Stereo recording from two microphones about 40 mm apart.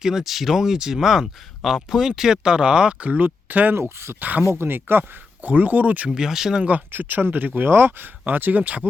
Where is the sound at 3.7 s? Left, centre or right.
Right.